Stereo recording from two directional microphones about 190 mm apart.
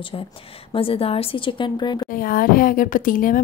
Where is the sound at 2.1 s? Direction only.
50° left (ahead or behind).